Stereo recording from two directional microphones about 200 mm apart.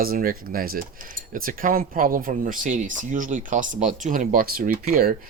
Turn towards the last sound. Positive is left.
turn(degrees=-45)  # may be behind; listen again after turning